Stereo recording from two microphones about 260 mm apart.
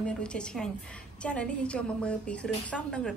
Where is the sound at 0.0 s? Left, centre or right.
Centre.